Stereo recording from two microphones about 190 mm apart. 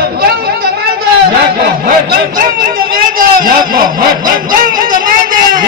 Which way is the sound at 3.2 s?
45° right (ahead or behind).